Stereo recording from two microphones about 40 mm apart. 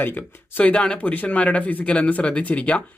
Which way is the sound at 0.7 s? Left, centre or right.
Left.